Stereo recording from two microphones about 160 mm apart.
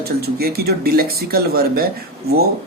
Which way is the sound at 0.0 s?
75° right (ahead or behind).